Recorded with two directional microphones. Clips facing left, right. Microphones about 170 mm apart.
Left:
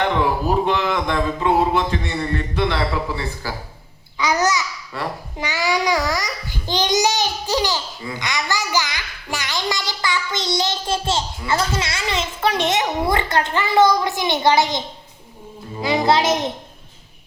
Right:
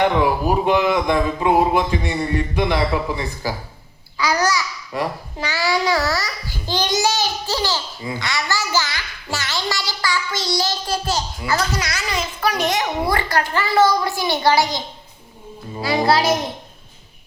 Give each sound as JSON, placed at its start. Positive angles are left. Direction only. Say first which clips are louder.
{"t": 0.0, "sound": "speech", "louder": "right 2 dB", "side_deg": -15}
{"t": 4.2, "sound": "babbling", "louder": "even", "side_deg": 20}
{"t": 4.9, "sound": "speech", "louder": "right 4 dB", "side_deg": -15}
{"t": 5.4, "sound": "a child's voice", "louder": "even", "side_deg": 20}